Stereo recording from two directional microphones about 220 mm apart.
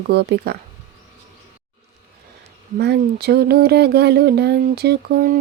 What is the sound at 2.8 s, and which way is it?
Speech, 50° right (ahead or behind).